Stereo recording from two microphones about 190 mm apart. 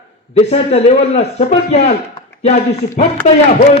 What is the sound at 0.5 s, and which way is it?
A man's voice, 35° left (ahead or behind).